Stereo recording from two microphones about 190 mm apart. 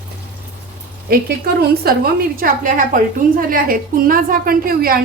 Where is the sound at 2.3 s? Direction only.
50° right (ahead or behind).